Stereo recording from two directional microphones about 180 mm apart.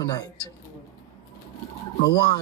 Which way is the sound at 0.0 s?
20° left (ahead or behind).